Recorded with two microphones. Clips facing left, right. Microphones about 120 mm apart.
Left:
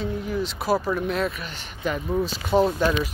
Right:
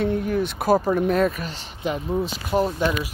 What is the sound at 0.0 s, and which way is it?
Speech, 55° right (ahead or behind).